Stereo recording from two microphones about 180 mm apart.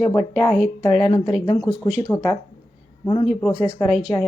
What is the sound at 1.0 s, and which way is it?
Speech, 30° left (ahead or behind).